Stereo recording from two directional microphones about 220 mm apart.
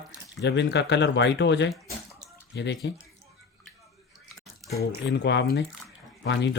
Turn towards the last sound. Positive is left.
turn(degrees=50)  # may be behind; listen again after turning